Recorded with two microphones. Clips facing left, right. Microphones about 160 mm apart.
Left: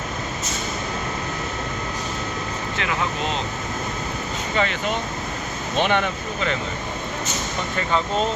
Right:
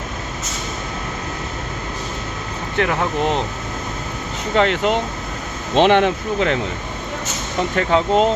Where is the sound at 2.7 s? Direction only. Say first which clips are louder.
Right 9 dB; 55° right (ahead or behind).